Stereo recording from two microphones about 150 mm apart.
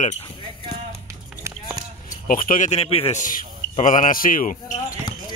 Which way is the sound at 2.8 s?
40° left (ahead or behind).